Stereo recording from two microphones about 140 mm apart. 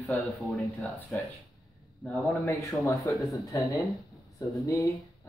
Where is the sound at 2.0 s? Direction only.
20° left (ahead or behind).